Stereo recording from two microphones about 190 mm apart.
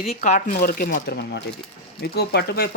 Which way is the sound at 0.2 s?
45° left (ahead or behind).